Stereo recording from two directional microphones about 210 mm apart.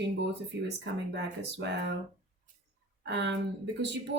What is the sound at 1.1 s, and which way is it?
Speech, 55° right (ahead or behind).